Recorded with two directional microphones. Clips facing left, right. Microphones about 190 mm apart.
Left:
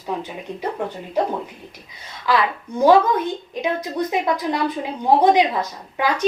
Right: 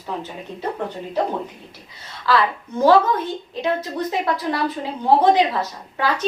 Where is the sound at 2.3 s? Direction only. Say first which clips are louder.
Right 1 dB; 15° left (ahead or behind).